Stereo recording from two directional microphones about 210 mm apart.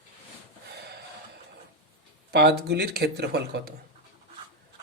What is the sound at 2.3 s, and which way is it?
Speech, 50° right (ahead or behind).